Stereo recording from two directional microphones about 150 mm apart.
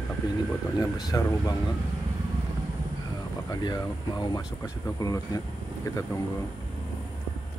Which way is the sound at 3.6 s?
30° left (ahead or behind).